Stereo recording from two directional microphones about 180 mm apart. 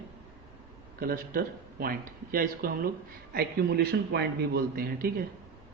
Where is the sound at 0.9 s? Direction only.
55° right (ahead or behind).